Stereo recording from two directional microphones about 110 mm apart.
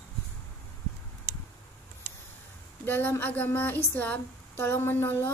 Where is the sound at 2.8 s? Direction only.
20° left (ahead or behind).